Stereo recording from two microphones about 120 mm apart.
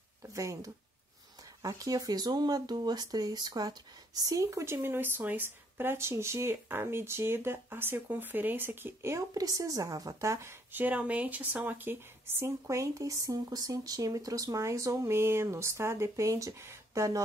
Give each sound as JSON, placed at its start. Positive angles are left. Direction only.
{"t": 0.2, "sound": "speech", "side_deg": -25}